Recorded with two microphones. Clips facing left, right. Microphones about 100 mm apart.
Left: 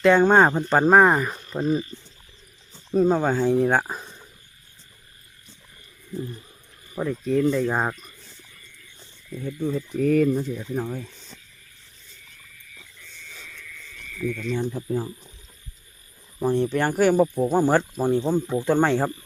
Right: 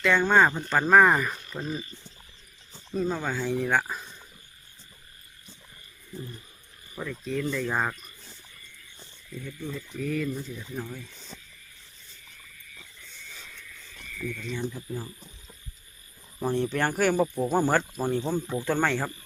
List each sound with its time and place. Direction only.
0.0 s speech: 40° left (ahead or behind)
2.9 s speech: 45° left (ahead or behind)
6.9 s speech: 25° left (ahead or behind)
7.6 s speech: 20° left (ahead or behind)
9.3 s speech: 50° left (ahead or behind); by 10.5 s 65° left (ahead or behind)
10.6 s speech: 45° left (ahead or behind)
11.3 s vehicle: 15° right (ahead or behind)
14.2 s speech: 5° right (ahead or behind)
14.6 s speech: 40° left (ahead or behind)
16.4 s speech: 10° left (ahead or behind)
17.7 s speech: 20° left (ahead or behind)